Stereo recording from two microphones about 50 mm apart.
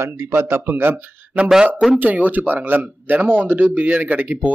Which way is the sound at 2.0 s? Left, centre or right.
Right.